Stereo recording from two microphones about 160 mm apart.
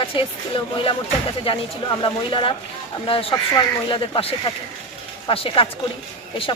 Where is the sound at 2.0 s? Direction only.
30° left (ahead or behind).